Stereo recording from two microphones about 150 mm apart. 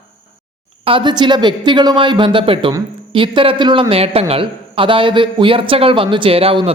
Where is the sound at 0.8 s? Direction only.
35° right (ahead or behind).